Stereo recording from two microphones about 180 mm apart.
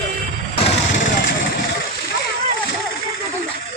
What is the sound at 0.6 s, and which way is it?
Vehicle, 45° left (ahead or behind).